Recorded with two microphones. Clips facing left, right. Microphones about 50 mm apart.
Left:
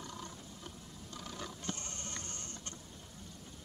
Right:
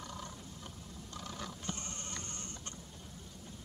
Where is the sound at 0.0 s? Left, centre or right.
Centre.